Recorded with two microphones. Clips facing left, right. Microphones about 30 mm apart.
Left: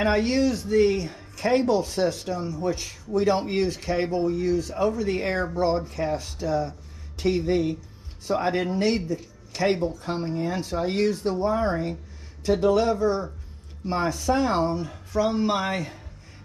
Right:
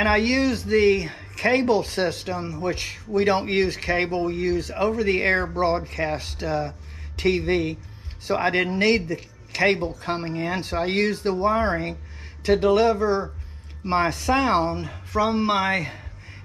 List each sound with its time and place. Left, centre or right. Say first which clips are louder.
0.0 s speech: right 2 dB; right